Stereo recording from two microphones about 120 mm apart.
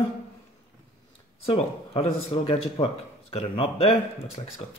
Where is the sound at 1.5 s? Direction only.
55° left (ahead or behind).